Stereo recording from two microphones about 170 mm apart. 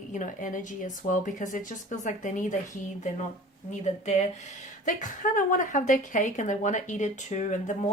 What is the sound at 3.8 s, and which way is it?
A woman's voice, 45° left (ahead or behind).